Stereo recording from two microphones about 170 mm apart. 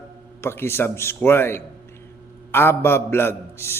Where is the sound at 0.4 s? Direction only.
15° left (ahead or behind).